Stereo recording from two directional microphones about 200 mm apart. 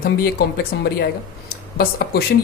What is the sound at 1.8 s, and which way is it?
Speech, 50° left (ahead or behind).